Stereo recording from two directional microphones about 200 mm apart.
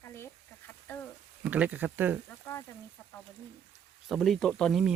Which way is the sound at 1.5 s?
10° right (ahead or behind).